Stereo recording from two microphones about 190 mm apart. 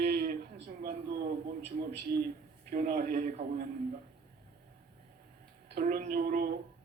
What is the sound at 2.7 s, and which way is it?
Speech, 45° right (ahead or behind).